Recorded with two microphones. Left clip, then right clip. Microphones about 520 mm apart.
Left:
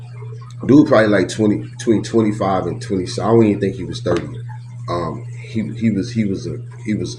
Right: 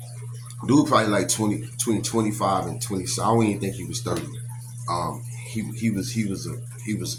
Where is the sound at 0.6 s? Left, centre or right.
Right.